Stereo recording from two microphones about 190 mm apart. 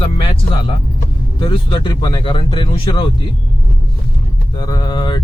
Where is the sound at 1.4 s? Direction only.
25° left (ahead or behind).